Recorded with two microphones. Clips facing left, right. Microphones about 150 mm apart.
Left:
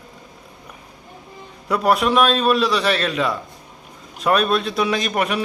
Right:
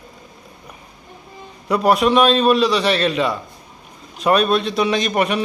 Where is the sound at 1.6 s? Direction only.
Centre (ahead or behind).